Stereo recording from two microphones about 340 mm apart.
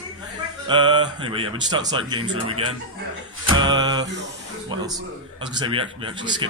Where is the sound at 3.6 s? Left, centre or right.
Centre.